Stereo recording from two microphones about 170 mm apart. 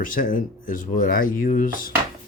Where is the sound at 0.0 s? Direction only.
55° left (ahead or behind).